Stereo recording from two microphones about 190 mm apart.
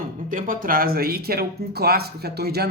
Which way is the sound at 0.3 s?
45° right (ahead or behind).